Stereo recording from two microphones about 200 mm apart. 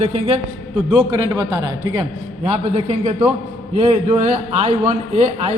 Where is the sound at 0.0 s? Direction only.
30° right (ahead or behind).